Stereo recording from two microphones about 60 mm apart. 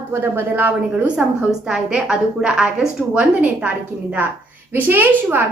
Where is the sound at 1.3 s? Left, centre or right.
Centre.